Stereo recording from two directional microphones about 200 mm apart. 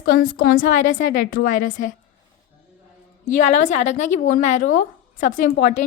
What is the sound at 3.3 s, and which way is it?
A woman's voice, 35° left (ahead or behind).